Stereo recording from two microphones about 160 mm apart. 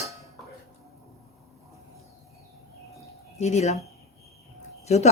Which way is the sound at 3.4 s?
45° left (ahead or behind).